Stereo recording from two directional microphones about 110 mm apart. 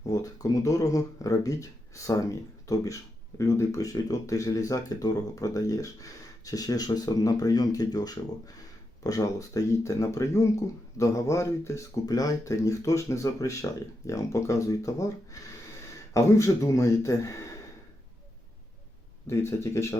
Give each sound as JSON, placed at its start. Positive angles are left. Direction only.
{"t": 0.1, "sound": "speech", "side_deg": 35}
{"t": 19.3, "sound": "speech", "side_deg": 25}